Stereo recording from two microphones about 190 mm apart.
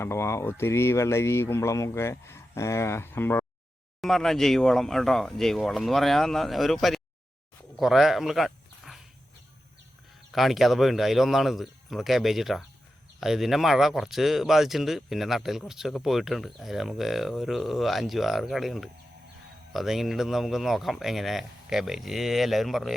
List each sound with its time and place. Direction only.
0.0 s speech: 15° left (ahead or behind)
10.3 s speech: centre (ahead or behind)